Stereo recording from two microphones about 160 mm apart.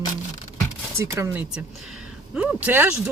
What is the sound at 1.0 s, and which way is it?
Speech, 15° right (ahead or behind).